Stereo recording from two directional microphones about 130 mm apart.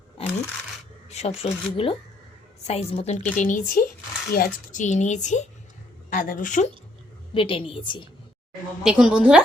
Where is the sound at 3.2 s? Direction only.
75° left (ahead or behind).